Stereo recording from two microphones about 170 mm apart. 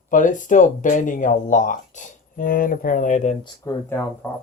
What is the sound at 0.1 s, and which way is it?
Speech, 50° left (ahead or behind).